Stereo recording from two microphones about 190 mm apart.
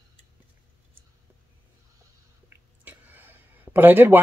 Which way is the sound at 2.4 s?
10° right (ahead or behind).